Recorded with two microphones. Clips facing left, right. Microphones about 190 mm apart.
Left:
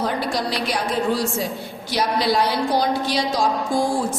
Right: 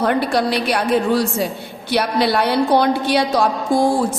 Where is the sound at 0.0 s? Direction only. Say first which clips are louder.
Right 6 dB; 60° right (ahead or behind).